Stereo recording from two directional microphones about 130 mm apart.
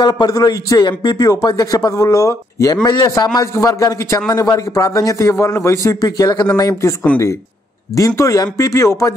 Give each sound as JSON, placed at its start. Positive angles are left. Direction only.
{"t": 0.0, "sound": "a man's voice", "side_deg": 30}
{"t": 8.2, "sound": "a man's voice", "side_deg": 25}